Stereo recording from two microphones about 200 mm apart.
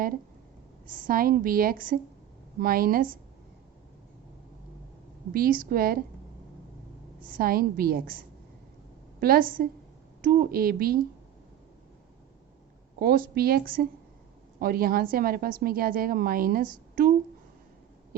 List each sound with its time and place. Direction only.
1.0 s a woman's voice: 45° right (ahead or behind)
5.3 s a woman's voice: 45° right (ahead or behind)
7.3 s a woman's voice: 45° right (ahead or behind)
9.2 s a woman's voice: 45° right (ahead or behind)
13.0 s a woman's voice: 50° right (ahead or behind)